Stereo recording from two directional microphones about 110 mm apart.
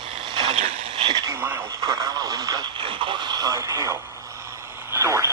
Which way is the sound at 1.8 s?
30° right (ahead or behind).